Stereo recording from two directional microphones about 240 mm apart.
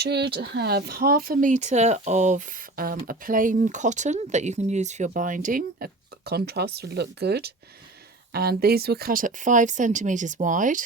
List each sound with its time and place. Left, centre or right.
0.0 s speech: right